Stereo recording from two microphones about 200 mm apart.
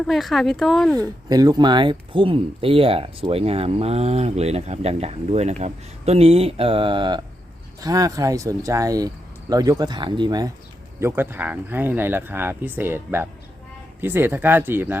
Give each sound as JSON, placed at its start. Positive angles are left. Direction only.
{"t": 0.1, "sound": "speech", "side_deg": 0}
{"t": 0.9, "sound": "speech", "side_deg": -20}